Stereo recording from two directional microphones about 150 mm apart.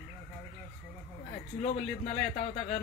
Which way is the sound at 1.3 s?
45° left (ahead or behind).